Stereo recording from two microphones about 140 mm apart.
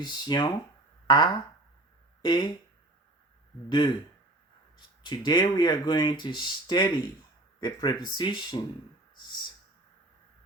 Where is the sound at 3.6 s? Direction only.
35° left (ahead or behind).